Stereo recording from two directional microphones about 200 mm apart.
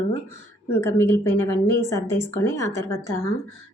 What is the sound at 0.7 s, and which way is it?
A woman's voice, 15° left (ahead or behind).